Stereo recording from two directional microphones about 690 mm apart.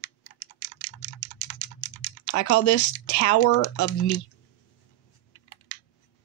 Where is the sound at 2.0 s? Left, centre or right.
Left.